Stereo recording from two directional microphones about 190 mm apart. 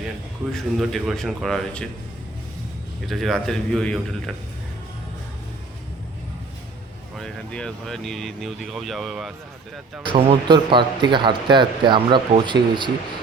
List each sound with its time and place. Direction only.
0.5 s speech: centre (ahead or behind)
3.1 s speech: centre (ahead or behind)
7.2 s speech: 5° left (ahead or behind)
10.1 s speech: 25° right (ahead or behind)